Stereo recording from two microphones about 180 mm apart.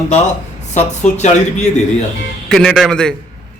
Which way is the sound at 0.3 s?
40° left (ahead or behind).